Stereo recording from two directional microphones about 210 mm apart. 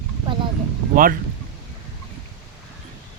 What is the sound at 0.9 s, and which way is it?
Speech, 40° right (ahead or behind).